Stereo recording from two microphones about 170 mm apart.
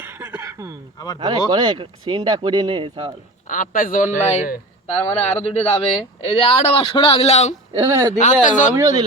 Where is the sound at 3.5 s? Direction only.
50° left (ahead or behind).